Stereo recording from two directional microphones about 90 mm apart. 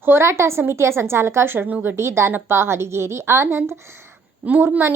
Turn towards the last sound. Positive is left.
turn(degrees=-25)  # may be behind; listen again after turning